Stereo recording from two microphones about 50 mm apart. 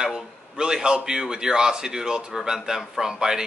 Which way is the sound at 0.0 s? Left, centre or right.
Centre.